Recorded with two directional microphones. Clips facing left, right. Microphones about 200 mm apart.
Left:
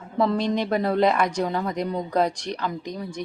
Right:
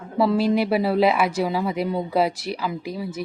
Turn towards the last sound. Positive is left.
turn(degrees=-5)  # may be behind; listen again after turning